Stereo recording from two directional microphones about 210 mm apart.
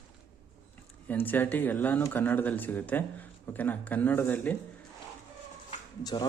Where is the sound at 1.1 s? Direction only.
10° left (ahead or behind).